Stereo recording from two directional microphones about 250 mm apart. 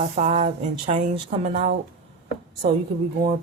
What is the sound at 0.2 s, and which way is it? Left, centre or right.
Speech, right.